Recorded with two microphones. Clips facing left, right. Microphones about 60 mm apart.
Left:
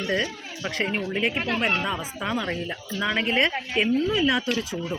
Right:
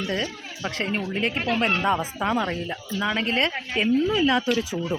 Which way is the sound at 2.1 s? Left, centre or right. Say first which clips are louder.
Right 4 dB; right.